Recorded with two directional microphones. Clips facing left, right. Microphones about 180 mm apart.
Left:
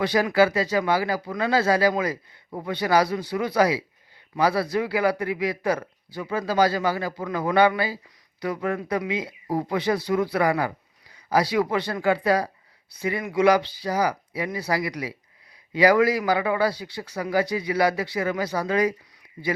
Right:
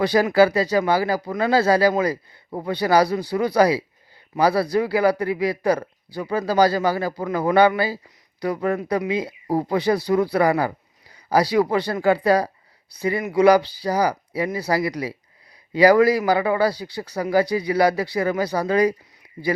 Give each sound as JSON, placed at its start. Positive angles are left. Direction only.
{"t": 0.0, "sound": "speech", "side_deg": -35}